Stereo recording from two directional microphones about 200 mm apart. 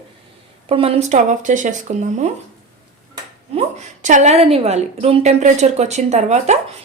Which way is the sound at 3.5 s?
35° right (ahead or behind).